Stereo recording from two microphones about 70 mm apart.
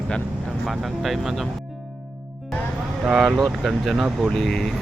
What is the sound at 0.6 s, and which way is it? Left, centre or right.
Speech, centre.